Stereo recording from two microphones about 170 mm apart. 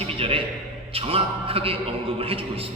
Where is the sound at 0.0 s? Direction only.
35° right (ahead or behind).